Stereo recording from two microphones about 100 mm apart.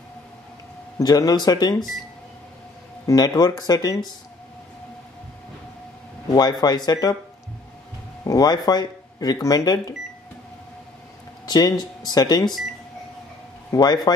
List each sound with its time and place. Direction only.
0.9 s speech: 40° left (ahead or behind)
3.1 s speech: 40° left (ahead or behind)
6.3 s speech: 45° left (ahead or behind)
8.2 s speech: 40° left (ahead or behind)
11.4 s speech: 40° left (ahead or behind)
13.7 s speech: 40° left (ahead or behind)